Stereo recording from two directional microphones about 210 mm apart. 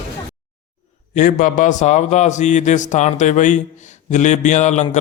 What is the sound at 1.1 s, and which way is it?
A man's voice, 40° left (ahead or behind).